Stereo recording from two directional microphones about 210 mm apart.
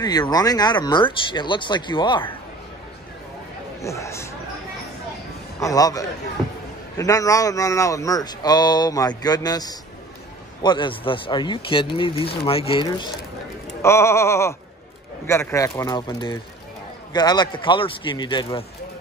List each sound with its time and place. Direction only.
0.0 s speech: 20° left (ahead or behind)
3.8 s speech: 15° left (ahead or behind)
5.6 s speech: 15° left (ahead or behind)
6.4 s speech: centre (ahead or behind)
7.0 s speech: 15° left (ahead or behind)